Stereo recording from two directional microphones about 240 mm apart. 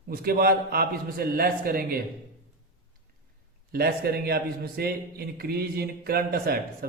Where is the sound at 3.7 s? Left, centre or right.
Right.